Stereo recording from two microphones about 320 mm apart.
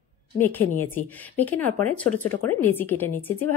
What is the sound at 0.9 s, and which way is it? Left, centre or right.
Speech, centre.